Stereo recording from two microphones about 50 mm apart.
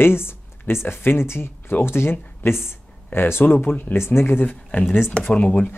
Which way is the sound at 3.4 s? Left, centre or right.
Left.